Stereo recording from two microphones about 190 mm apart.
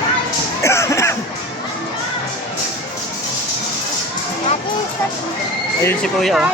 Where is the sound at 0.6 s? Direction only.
15° left (ahead or behind).